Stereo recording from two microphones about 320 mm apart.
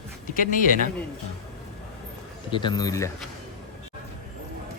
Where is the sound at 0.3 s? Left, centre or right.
Left.